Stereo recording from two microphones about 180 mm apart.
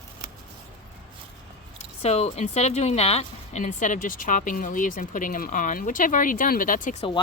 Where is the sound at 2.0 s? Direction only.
35° left (ahead or behind).